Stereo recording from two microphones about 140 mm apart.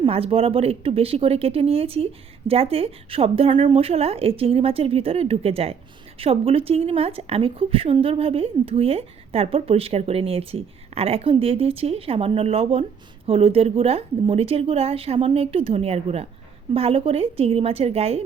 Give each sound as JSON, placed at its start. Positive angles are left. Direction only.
{"t": 0.0, "sound": "a woman's voice", "side_deg": -45}